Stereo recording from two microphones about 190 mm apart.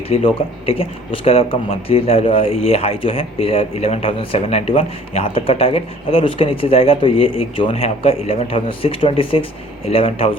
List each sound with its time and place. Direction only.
0.1 s speech: 30° left (ahead or behind)